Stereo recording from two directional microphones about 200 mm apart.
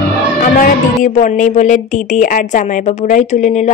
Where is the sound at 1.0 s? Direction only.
40° left (ahead or behind).